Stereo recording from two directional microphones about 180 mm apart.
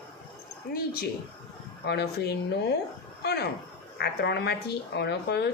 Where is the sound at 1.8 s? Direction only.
65° left (ahead or behind).